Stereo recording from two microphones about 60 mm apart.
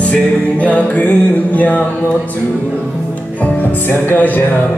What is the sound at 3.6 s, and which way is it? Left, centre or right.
Music, left.